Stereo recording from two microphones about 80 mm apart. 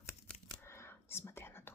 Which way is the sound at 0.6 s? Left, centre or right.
Left.